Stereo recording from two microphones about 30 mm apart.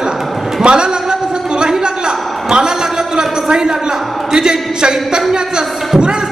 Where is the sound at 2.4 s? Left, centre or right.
Centre.